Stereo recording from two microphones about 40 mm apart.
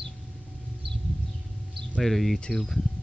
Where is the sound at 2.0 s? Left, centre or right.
Centre.